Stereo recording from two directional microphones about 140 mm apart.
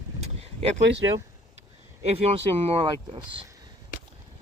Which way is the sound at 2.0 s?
45° right (ahead or behind).